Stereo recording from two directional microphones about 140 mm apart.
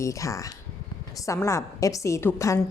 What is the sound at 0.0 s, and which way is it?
A woman's voice, 20° left (ahead or behind).